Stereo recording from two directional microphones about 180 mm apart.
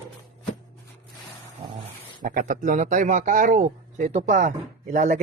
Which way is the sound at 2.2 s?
50° right (ahead or behind).